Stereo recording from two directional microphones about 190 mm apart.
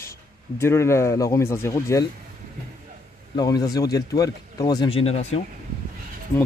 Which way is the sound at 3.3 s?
20° left (ahead or behind).